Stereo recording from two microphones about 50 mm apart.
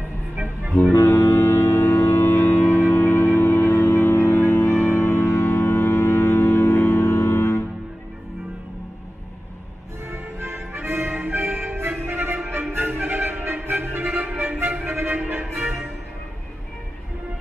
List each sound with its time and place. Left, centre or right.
0.9 s music: left
10.1 s music: right